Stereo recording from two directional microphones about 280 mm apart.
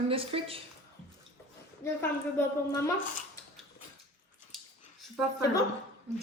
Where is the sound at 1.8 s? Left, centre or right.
Centre.